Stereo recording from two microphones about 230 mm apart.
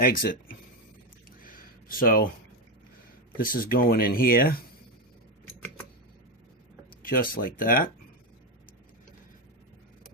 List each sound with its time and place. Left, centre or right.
0.0 s speech: left
1.5 s a sound: left
3.3 s speech: left
7.0 s speech: left